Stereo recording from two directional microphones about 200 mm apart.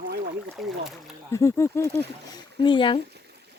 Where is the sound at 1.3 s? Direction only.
15° left (ahead or behind).